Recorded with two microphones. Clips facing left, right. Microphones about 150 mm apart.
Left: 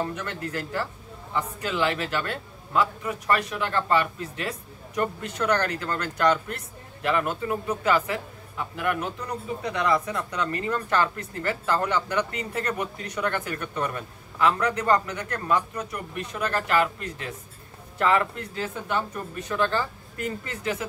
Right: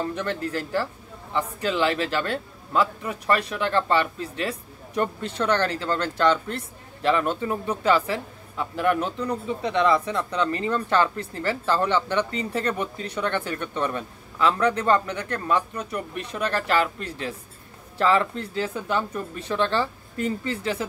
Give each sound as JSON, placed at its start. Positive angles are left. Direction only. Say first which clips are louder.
{"t": 0.1, "sound": "a man's voice", "louder": "right 4 dB", "side_deg": -30}